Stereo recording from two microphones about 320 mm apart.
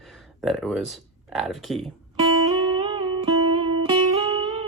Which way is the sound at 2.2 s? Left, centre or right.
Centre.